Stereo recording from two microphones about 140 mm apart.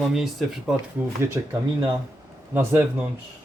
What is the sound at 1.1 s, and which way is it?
Speech, 20° right (ahead or behind).